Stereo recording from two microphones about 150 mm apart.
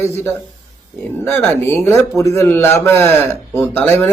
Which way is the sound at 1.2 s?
15° left (ahead or behind).